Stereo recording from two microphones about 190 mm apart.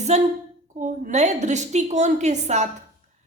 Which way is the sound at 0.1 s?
35° right (ahead or behind).